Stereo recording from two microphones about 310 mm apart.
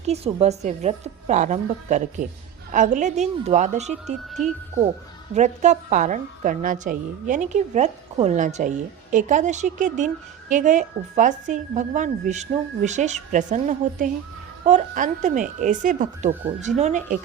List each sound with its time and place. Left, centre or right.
0.0 s a woman's voice: centre
5.3 s a woman's voice: right